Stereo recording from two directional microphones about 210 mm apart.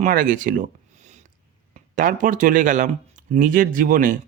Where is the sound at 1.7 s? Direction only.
40° right (ahead or behind).